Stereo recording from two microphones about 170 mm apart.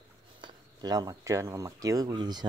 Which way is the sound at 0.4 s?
20° right (ahead or behind).